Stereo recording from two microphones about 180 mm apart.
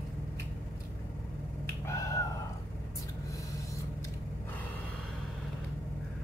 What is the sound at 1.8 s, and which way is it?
Finger snapping, 20° left (ahead or behind).